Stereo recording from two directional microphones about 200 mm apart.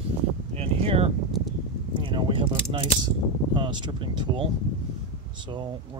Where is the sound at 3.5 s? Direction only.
25° right (ahead or behind).